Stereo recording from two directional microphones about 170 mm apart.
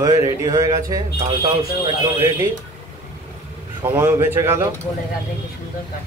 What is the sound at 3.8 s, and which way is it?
Speech, 15° right (ahead or behind).